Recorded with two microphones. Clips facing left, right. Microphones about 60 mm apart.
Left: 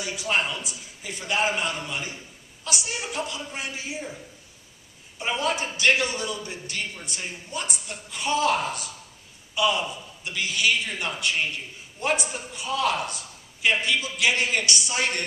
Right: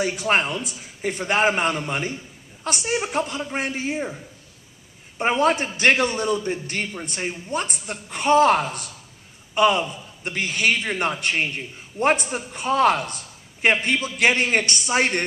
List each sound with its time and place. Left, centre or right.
0.0 s a man's voice: right
5.2 s a man's voice: right